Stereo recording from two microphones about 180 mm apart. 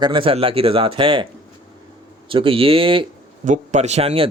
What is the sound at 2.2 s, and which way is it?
Speech, 30° right (ahead or behind).